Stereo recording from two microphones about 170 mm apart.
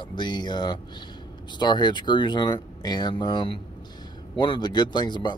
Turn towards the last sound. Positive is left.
turn(degrees=25)  # may be behind; listen again after turning